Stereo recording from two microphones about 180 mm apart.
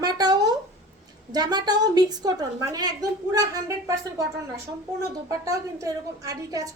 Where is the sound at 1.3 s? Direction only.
20° right (ahead or behind).